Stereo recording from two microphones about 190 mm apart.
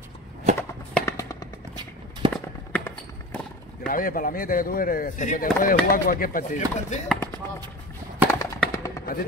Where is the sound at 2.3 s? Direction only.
5° left (ahead or behind).